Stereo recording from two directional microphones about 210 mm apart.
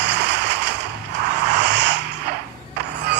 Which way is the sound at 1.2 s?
55° right (ahead or behind).